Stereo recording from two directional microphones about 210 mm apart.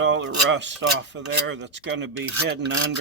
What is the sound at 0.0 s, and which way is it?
Speech, 65° right (ahead or behind).